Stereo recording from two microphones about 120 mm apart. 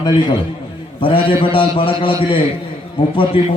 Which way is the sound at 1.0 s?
50° left (ahead or behind).